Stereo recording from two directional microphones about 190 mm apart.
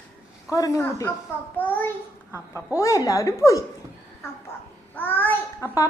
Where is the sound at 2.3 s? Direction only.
10° right (ahead or behind).